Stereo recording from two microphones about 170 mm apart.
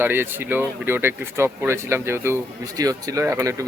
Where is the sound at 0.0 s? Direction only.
10° right (ahead or behind).